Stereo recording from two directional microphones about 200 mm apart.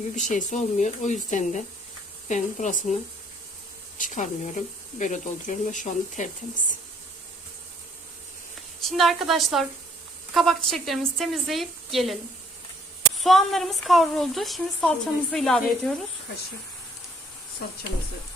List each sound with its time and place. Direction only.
0.3 s speech: 40° left (ahead or behind)
3.9 s speech: 40° left (ahead or behind)
8.9 s a woman's voice: centre (ahead or behind)